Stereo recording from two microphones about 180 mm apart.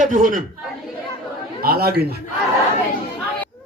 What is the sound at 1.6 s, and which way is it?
Speech, 60° right (ahead or behind).